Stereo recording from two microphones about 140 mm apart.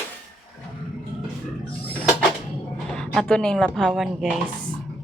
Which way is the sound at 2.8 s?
5° left (ahead or behind).